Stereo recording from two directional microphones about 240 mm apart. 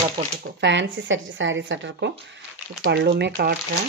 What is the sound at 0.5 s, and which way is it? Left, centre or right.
Speech, right.